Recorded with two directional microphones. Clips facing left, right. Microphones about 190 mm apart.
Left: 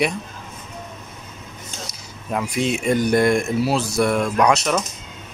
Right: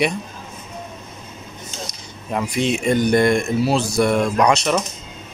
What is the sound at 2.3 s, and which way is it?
Speech, centre (ahead or behind).